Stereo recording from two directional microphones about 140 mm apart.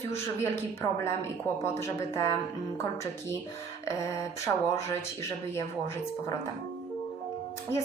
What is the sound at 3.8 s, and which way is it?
Speech, 20° left (ahead or behind).